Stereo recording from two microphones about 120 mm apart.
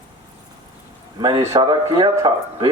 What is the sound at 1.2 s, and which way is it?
Speech, 35° right (ahead or behind).